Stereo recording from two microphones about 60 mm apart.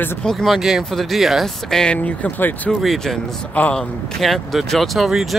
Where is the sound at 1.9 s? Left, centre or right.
Left.